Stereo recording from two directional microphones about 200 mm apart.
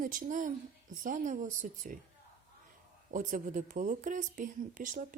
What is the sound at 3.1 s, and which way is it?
A woman's voice, 40° right (ahead or behind).